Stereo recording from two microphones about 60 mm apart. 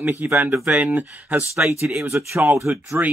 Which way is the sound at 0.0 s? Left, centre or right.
Right.